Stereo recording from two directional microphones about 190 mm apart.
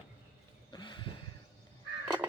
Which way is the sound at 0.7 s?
25° left (ahead or behind).